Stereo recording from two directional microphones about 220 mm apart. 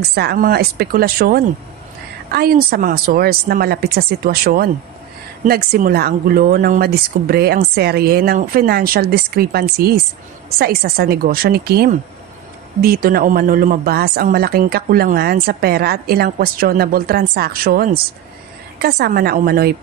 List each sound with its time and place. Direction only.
0.0 s speech: 45° right (ahead or behind)